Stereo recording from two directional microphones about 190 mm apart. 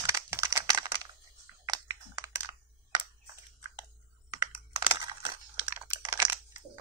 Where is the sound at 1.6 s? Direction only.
20° right (ahead or behind).